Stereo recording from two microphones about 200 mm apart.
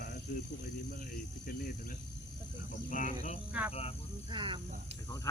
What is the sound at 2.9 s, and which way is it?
Speech, 40° left (ahead or behind).